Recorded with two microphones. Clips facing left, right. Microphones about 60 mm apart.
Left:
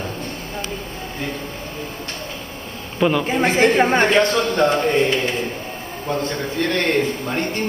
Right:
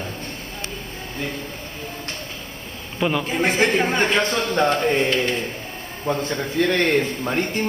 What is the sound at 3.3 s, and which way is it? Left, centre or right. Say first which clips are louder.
Speech: left 2 dB; left.